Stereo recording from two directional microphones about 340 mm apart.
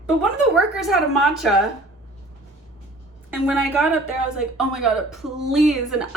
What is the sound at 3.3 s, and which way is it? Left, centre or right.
Speech, centre.